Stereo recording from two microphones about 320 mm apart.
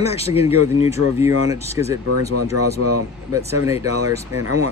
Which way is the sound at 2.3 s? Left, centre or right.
Right.